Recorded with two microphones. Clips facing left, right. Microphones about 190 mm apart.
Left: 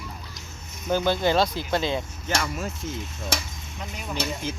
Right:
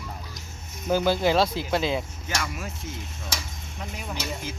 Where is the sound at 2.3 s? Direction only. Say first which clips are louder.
Left 4 dB; 45° left (ahead or behind).